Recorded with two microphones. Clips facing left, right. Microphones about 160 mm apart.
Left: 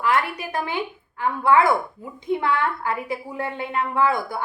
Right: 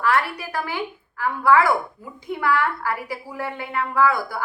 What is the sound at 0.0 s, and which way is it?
A woman's voice, 20° left (ahead or behind).